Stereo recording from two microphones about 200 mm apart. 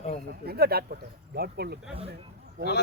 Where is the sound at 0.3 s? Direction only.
50° right (ahead or behind).